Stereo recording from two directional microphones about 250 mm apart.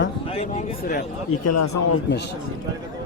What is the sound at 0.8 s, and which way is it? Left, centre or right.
Speech, left.